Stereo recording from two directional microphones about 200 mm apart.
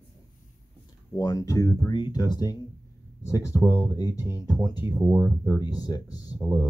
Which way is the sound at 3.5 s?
10° right (ahead or behind).